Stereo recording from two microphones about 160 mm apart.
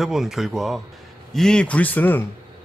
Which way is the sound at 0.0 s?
Centre (ahead or behind).